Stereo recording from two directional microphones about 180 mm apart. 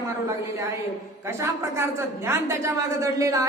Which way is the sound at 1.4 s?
15° right (ahead or behind).